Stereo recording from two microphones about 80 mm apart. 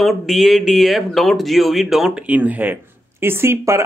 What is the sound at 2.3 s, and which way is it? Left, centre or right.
Speech, centre.